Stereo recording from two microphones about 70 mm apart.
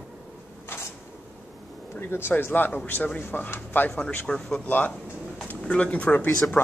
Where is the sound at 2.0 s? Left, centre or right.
Left.